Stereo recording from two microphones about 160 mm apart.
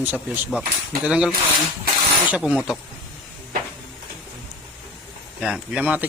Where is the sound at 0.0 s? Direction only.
10° right (ahead or behind).